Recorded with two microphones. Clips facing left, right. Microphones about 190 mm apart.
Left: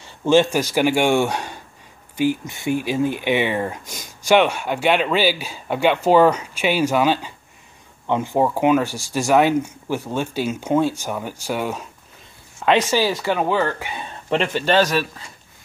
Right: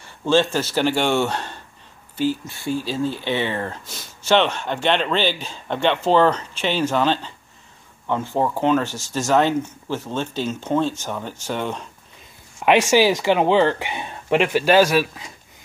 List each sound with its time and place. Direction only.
0.0 s speech: 15° left (ahead or behind)
12.5 s speech: 15° right (ahead or behind)
14.3 s speech: 5° right (ahead or behind)